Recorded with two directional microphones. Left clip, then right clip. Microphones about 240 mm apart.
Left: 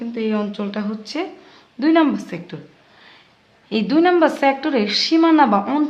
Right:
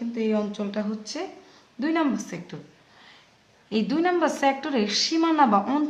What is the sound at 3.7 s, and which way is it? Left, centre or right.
A woman's voice, left.